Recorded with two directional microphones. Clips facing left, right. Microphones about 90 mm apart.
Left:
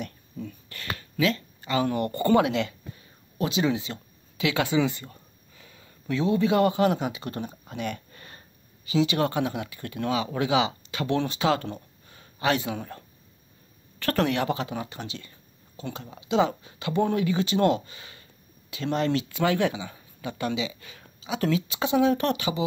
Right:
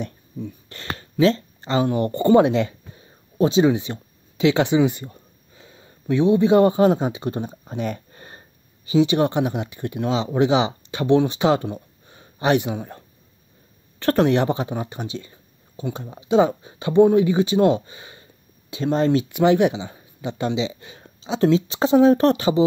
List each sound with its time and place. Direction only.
0.0 s speech: 25° right (ahead or behind)